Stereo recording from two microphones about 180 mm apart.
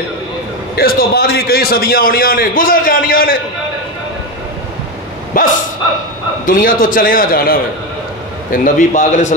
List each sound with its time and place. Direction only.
0.7 s a man's voice: 55° left (ahead or behind)
5.4 s a man's voice: 50° left (ahead or behind)